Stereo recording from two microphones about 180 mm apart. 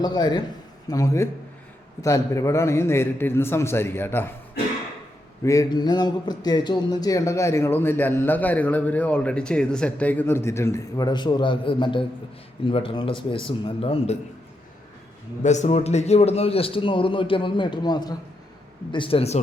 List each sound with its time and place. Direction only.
0.0 s a man's voice: 20° left (ahead or behind)
5.4 s a man's voice: 20° left (ahead or behind)
15.4 s a man's voice: 40° left (ahead or behind)